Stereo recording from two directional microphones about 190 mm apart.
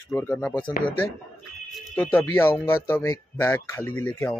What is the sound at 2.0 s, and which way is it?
Speech, 10° left (ahead or behind).